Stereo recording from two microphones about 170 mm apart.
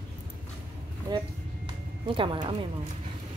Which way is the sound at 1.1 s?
25° right (ahead or behind).